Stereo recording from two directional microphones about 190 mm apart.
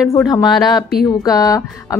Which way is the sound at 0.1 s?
20° left (ahead or behind).